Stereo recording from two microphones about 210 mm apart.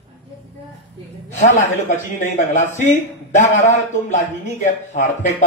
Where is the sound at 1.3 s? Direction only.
35° left (ahead or behind).